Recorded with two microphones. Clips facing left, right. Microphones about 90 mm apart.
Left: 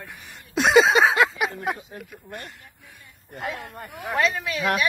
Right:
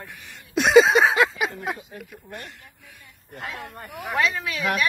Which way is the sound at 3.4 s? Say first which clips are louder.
Left 3 dB; centre (ahead or behind).